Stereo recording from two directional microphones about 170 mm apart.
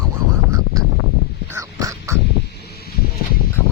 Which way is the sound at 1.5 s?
20° right (ahead or behind).